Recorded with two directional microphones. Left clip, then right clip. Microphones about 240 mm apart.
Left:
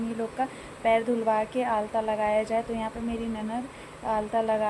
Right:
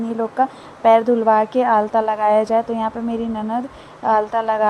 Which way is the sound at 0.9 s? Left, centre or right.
Centre.